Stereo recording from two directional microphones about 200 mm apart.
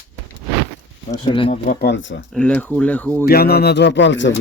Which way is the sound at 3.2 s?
50° left (ahead or behind).